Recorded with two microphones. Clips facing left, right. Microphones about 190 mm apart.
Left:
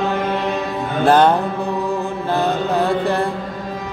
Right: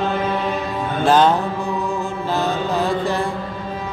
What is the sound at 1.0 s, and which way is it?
Music, 60° left (ahead or behind).